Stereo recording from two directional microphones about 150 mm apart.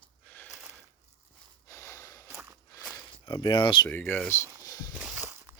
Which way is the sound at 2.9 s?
30° left (ahead or behind).